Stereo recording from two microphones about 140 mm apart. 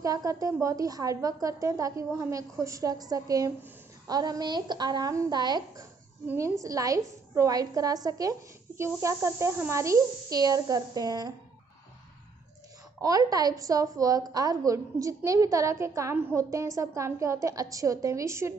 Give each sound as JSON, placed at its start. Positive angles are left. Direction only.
{"t": 0.0, "sound": "a woman's voice", "side_deg": -25}
{"t": 6.2, "sound": "a woman's voice", "side_deg": -20}
{"t": 13.0, "sound": "a woman's voice", "side_deg": -25}